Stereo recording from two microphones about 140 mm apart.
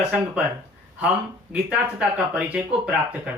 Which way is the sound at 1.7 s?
10° right (ahead or behind).